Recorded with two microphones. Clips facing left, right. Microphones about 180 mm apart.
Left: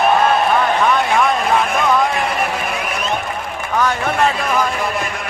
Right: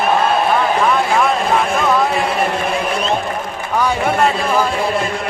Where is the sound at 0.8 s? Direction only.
5° right (ahead or behind).